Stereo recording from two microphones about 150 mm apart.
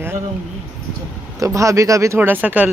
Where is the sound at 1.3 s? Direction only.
20° right (ahead or behind).